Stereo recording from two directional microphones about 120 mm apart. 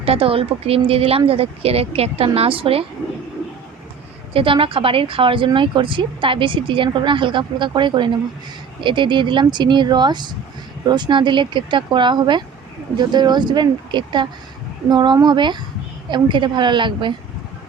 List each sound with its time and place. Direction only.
0.0 s speech: 50° right (ahead or behind)
4.4 s speech: 45° right (ahead or behind)